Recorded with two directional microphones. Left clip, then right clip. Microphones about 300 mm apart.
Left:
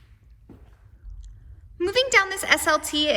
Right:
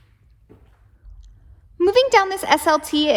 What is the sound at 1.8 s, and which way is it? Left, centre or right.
A woman's voice, centre.